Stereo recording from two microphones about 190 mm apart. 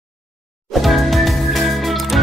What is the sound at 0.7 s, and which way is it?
Music, centre (ahead or behind).